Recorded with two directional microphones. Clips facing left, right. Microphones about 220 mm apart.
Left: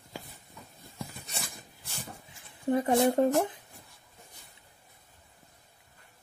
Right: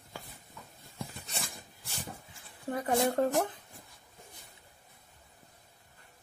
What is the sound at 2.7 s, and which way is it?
Speech, 25° left (ahead or behind).